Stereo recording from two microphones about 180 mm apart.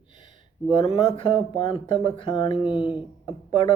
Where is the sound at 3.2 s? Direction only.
30° left (ahead or behind).